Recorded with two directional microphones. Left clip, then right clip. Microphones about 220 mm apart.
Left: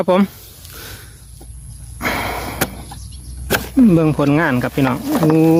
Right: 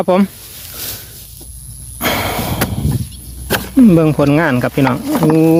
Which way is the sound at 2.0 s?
10° right (ahead or behind).